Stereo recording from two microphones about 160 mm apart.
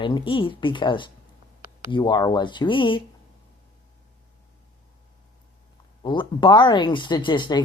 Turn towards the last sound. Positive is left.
turn(degrees=30)  # may be behind; listen again after turning